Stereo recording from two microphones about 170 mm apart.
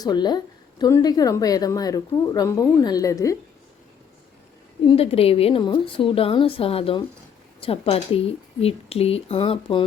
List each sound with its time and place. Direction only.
0.0 s a woman's voice: 25° left (ahead or behind)
4.9 s a woman's voice: 35° left (ahead or behind)